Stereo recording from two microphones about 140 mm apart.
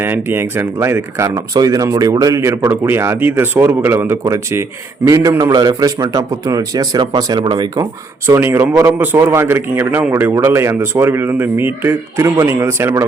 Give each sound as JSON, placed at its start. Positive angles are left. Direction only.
{"t": 0.0, "sound": "a man's voice", "side_deg": -15}
{"t": 5.5, "sound": "speech", "side_deg": -30}
{"t": 8.3, "sound": "a man's voice", "side_deg": -15}